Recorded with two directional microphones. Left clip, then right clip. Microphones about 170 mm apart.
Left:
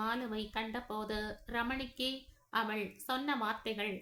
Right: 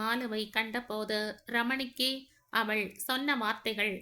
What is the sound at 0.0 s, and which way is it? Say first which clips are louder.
A woman's voice: right 4 dB; 25° right (ahead or behind).